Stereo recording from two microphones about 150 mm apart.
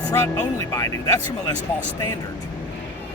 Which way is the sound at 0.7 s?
25° left (ahead or behind).